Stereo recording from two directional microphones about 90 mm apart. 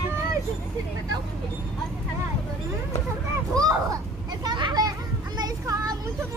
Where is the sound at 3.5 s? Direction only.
40° right (ahead or behind).